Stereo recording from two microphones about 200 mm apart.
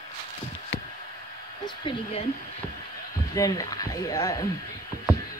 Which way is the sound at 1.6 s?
25° left (ahead or behind).